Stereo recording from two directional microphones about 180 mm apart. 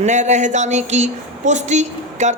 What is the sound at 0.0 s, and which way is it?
A woman's voice, 40° right (ahead or behind).